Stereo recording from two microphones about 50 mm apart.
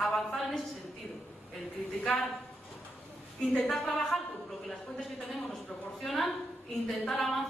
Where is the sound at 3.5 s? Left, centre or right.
Centre.